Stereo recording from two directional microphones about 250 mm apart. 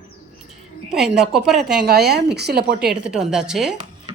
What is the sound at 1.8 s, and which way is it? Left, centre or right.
Speech, right.